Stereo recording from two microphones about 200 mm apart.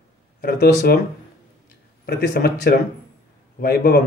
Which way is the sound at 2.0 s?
50° left (ahead or behind).